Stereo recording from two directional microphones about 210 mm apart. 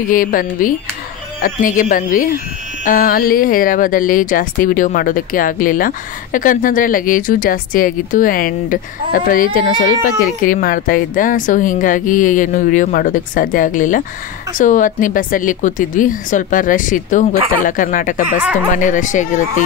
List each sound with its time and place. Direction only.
0.1 s speech: 40° left (ahead or behind)
18.4 s speech: 5° right (ahead or behind)
18.7 s speech: 40° left (ahead or behind)